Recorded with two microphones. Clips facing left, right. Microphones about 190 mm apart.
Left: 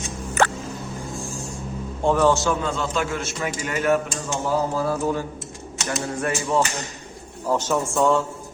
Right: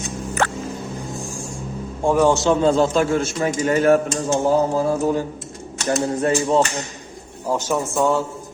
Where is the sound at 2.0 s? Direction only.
10° right (ahead or behind); by 4.5 s 45° right (ahead or behind).